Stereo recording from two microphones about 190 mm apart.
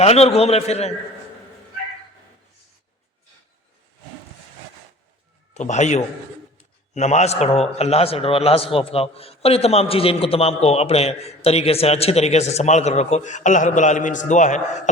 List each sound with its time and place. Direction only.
0.0 s a man's voice: 35° left (ahead or behind)
5.5 s a man's voice: 40° left (ahead or behind)